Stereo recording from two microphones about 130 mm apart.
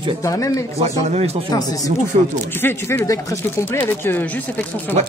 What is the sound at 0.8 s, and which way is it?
Speech, 50° right (ahead or behind).